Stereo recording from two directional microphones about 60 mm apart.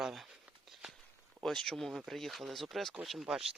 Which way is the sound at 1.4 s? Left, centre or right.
Centre.